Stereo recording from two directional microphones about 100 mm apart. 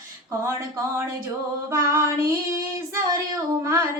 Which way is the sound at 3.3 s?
30° right (ahead or behind).